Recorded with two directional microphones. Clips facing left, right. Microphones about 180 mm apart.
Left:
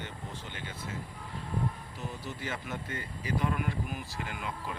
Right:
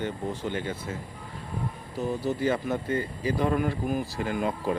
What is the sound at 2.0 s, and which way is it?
Speech, 35° right (ahead or behind).